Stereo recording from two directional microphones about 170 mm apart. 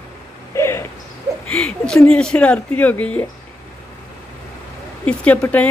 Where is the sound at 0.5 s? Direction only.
15° left (ahead or behind).